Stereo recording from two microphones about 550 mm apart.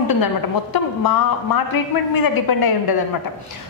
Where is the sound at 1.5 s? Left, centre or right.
Left.